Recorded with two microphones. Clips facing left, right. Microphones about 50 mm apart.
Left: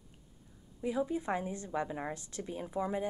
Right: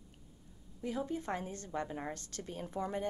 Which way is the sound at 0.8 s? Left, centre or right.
Centre.